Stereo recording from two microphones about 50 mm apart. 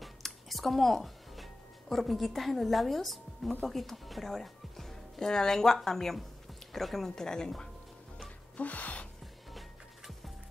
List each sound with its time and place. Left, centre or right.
0.0 s music: centre
3.6 s speech: centre
8.5 s music: left
9.5 s music: centre